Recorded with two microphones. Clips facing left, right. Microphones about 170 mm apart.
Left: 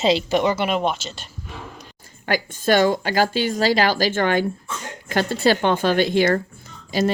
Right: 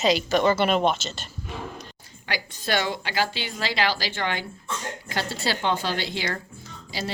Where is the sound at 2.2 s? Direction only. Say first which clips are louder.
Left 9 dB; 45° left (ahead or behind).